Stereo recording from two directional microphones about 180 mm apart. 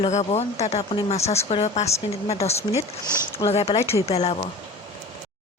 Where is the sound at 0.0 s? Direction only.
40° left (ahead or behind).